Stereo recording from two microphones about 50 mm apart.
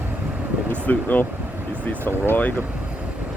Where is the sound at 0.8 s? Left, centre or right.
Left.